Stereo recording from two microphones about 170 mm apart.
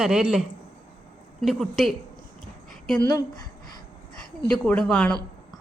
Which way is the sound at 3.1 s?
25° left (ahead or behind).